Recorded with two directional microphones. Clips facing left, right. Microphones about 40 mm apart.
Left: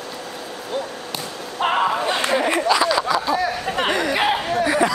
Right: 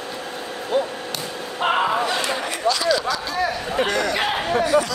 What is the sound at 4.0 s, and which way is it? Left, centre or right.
Chatter, centre.